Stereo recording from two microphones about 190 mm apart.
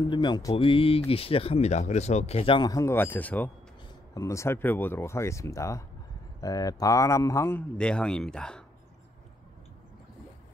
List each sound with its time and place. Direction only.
0.1 s speech: 25° left (ahead or behind); by 8.6 s 5° left (ahead or behind)